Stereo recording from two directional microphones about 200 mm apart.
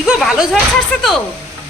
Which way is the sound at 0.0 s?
Centre (ahead or behind).